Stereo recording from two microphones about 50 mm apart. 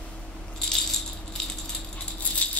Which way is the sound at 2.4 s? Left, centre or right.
Left.